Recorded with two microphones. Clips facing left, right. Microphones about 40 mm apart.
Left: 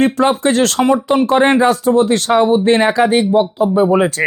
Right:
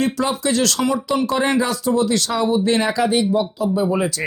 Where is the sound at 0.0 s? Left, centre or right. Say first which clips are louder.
Left 7 dB; left.